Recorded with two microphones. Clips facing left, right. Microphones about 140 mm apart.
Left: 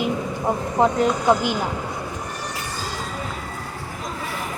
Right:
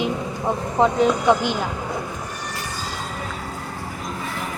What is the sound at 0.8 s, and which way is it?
Speech, 5° left (ahead or behind).